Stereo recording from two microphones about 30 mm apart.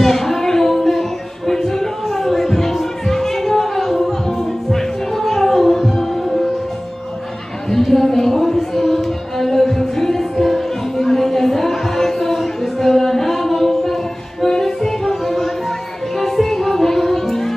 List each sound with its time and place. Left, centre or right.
0.0 s a sound: centre
1.5 s music: centre
7.7 s music: centre